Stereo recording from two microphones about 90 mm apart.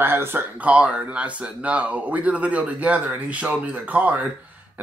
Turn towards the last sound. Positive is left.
turn(degrees=-20)  # may be behind; listen again after turning